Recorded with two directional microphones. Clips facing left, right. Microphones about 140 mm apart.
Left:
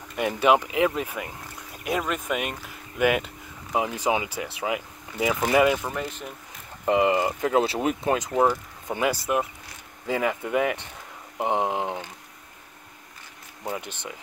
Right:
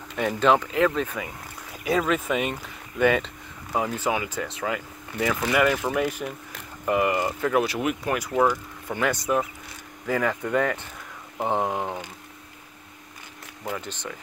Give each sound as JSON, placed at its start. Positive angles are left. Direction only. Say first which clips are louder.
{"t": 0.4, "sound": "speech", "louder": "even", "side_deg": 15}
{"t": 5.9, "sound": "speech", "louder": "right 6 dB", "side_deg": -15}
{"t": 6.9, "sound": "speech", "louder": "left 2 dB", "side_deg": 20}
{"t": 10.0, "sound": "speech", "louder": "right 1 dB", "side_deg": 20}
{"t": 13.7, "sound": "speech", "louder": "even", "side_deg": 15}